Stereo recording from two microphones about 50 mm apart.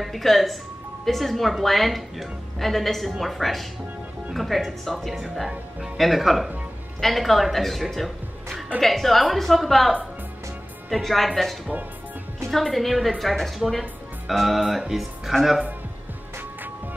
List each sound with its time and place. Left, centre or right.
0.0 s a woman's voice: centre